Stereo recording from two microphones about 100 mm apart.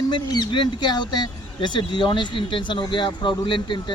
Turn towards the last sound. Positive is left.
turn(degrees=55)  # may be behind; listen again after turning